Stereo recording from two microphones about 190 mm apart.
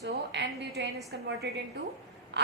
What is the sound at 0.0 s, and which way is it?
A woman's voice, 65° right (ahead or behind).